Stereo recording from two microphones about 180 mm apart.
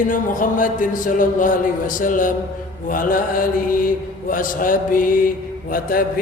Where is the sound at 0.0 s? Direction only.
50° left (ahead or behind).